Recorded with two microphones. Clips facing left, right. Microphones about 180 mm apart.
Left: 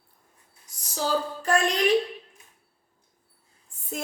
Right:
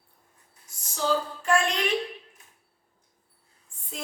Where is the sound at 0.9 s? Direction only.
40° left (ahead or behind).